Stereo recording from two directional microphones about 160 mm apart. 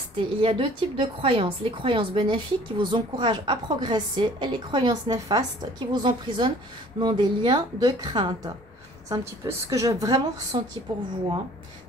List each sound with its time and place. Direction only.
0.4 s a woman's voice: 30° right (ahead or behind)